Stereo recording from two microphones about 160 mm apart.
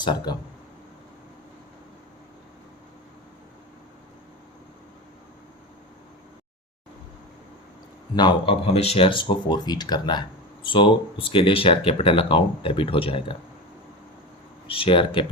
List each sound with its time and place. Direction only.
0.0 s speech: 30° left (ahead or behind)
8.1 s speech: 30° left (ahead or behind)
14.7 s speech: 35° left (ahead or behind)